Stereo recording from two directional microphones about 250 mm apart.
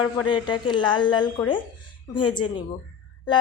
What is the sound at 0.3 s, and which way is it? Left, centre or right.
Speech, centre.